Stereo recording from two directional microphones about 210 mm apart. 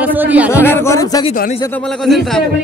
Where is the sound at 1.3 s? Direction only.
40° left (ahead or behind).